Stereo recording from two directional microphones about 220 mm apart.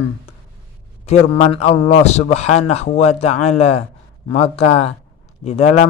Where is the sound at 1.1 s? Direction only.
30° left (ahead or behind).